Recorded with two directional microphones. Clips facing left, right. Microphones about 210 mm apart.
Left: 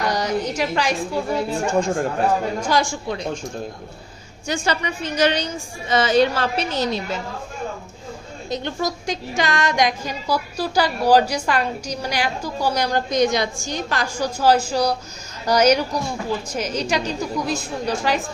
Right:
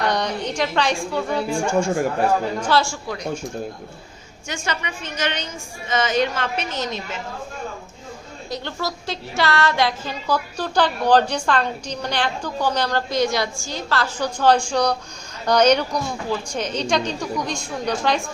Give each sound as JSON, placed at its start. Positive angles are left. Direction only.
{"t": 0.0, "sound": "a woman's voice", "side_deg": 10}
{"t": 1.6, "sound": "speech", "side_deg": -10}
{"t": 2.6, "sound": "speech", "side_deg": 15}
{"t": 4.4, "sound": "a woman's voice", "side_deg": 35}
{"t": 8.4, "sound": "speech", "side_deg": 20}